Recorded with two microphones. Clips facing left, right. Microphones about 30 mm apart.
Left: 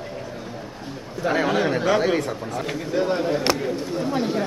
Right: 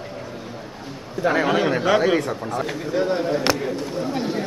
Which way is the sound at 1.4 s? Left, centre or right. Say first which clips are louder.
Even; centre.